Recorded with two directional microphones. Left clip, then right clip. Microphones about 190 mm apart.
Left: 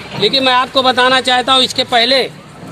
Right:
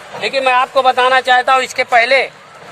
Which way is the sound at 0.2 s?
5° left (ahead or behind).